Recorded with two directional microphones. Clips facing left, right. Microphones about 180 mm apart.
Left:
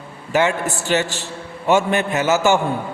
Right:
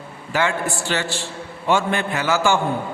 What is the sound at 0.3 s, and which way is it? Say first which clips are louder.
A man's voice: left 3 dB; 20° left (ahead or behind).